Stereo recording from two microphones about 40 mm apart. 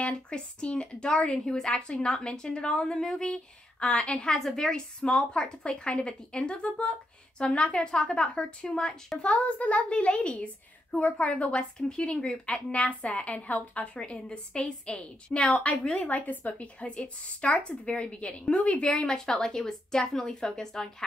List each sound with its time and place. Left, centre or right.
0.0 s a woman's voice: left